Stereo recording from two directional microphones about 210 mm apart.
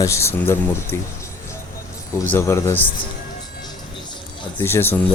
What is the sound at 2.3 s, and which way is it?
Speech, 15° left (ahead or behind).